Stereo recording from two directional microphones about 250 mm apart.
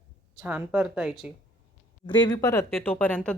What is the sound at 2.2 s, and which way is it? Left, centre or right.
Speech, centre.